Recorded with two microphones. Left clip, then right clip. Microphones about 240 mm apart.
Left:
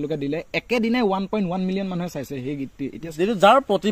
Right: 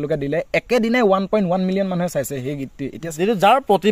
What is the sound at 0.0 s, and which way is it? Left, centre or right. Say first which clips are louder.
Speech: right 5 dB; right.